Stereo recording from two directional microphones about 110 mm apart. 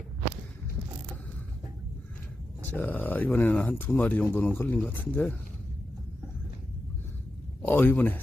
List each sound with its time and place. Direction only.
2.6 s speech: 15° left (ahead or behind)
7.6 s a man's voice: 15° left (ahead or behind)